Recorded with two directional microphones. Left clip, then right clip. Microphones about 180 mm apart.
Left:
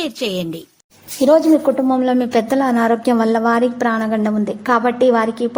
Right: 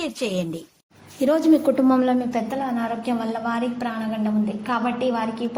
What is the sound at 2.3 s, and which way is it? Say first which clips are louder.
A woman's voice: left 10 dB; 50° left (ahead or behind).